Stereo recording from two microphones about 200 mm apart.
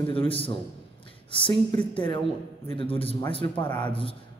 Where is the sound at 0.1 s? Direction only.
25° left (ahead or behind).